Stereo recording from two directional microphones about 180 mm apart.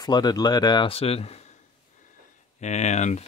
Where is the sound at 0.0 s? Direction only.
25° left (ahead or behind).